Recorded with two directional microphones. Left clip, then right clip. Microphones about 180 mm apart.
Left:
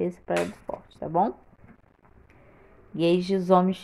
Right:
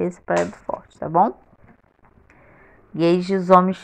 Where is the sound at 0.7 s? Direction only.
25° right (ahead or behind).